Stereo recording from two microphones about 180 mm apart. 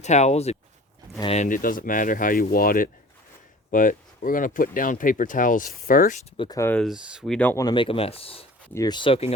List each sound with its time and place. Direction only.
0.0 s speech: 40° left (ahead or behind)
6.3 s speech: 30° left (ahead or behind)
6.6 s speech: 10° left (ahead or behind)
6.8 s speech: 5° right (ahead or behind)
7.3 s speech: 10° left (ahead or behind)
7.6 s speech: 25° left (ahead or behind)
8.7 s speech: 20° left (ahead or behind)